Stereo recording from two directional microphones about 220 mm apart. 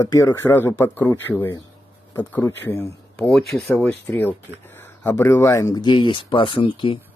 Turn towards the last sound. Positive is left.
turn(degrees=25)  # may be behind; listen again after turning